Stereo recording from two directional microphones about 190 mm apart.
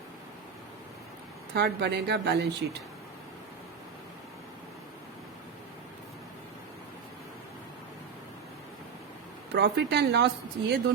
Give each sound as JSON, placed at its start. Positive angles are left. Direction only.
{"t": 1.5, "sound": "speech", "side_deg": -60}
{"t": 9.6, "sound": "speech", "side_deg": -60}